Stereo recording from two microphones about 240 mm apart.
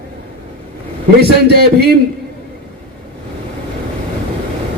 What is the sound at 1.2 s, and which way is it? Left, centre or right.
Speech, right.